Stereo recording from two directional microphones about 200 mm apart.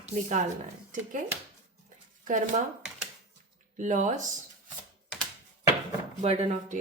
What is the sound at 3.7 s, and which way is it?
Speech, 35° right (ahead or behind).